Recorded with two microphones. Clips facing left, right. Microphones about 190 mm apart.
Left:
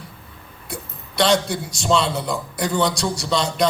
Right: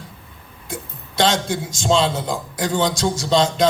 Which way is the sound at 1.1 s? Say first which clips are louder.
Left 1 dB; 90° right.